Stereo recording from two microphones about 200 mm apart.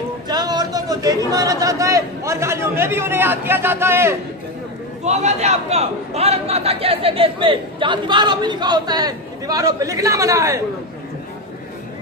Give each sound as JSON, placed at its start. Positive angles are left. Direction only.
{"t": 0.3, "sound": "a man's voice", "side_deg": -20}
{"t": 5.0, "sound": "a man's voice", "side_deg": -35}